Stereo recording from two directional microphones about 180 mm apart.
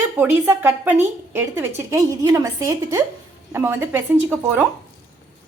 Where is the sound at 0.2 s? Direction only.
10° right (ahead or behind).